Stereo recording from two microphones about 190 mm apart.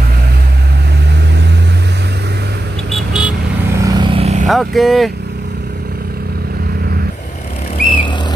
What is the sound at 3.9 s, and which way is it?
Vehicle, 30° right (ahead or behind).